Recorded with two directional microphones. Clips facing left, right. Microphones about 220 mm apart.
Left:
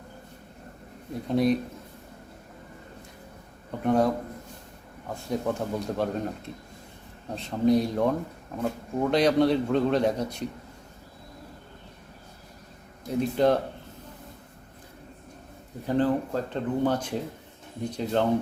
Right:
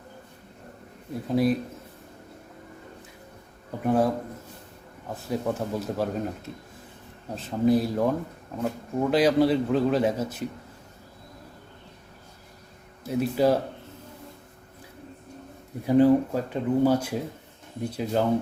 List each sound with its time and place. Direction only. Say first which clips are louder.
1.3 s a man's voice: even; 5° right (ahead or behind)
3.8 s a man's voice: even; 5° right (ahead or behind)
13.1 s speech: even; 5° right (ahead or behind)
15.9 s speech: right 6 dB; 10° right (ahead or behind)